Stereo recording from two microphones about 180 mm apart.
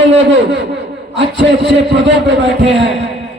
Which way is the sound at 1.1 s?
75° right (ahead or behind).